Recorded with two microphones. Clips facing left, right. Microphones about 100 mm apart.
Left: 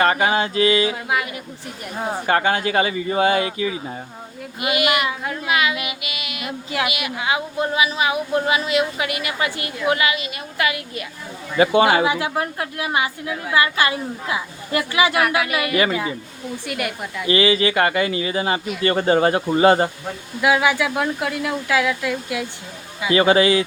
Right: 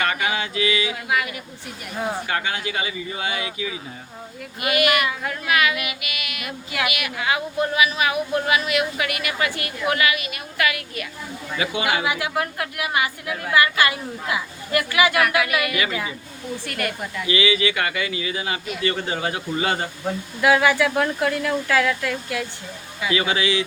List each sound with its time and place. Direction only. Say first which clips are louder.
0.0 s speech: left 6 dB; 35° left (ahead or behind)
2.2 s speech: left 7 dB; 45° left (ahead or behind)
4.6 s speech: even; 20° left (ahead or behind)
11.5 s speech: left 9 dB; 40° left (ahead or behind)
16.6 s speech: left 2 dB; 15° left (ahead or behind)
17.2 s speech: left 4 dB; 40° left (ahead or behind)
20.4 s speech: even; 15° left (ahead or behind)
23.1 s speech: left 7 dB; 40° left (ahead or behind)